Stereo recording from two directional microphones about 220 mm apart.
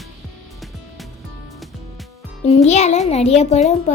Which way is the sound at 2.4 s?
30° left (ahead or behind).